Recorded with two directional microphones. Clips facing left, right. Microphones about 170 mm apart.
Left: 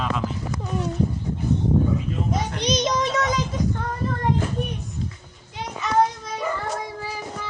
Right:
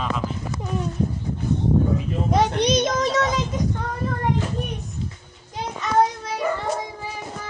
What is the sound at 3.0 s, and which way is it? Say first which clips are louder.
Speech: right 2 dB; 30° right (ahead or behind).